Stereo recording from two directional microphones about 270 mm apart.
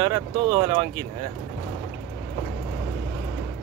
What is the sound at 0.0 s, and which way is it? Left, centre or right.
Speech, centre.